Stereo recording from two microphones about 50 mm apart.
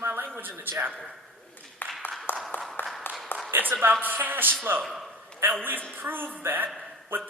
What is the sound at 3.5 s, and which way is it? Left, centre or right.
A man's voice, right.